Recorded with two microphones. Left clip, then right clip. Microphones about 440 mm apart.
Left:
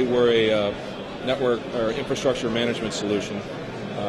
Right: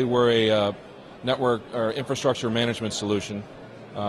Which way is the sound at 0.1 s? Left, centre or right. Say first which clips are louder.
Even; right.